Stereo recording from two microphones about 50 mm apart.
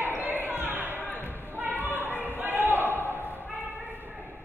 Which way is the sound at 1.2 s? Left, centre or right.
Right.